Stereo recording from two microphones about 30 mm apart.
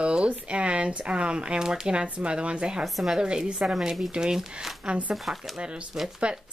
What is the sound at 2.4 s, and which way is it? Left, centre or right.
Speech, right.